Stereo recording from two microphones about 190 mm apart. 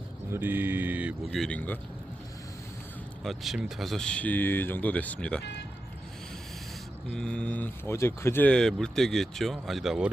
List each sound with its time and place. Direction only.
0.3 s speech: 10° right (ahead or behind); by 1.8 s 10° left (ahead or behind)
3.2 s speech: centre (ahead or behind)
5.4 s speech: 65° left (ahead or behind)
7.1 s speech: 5° left (ahead or behind)